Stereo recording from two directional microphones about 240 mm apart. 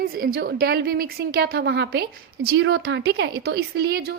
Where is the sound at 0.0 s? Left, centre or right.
Right.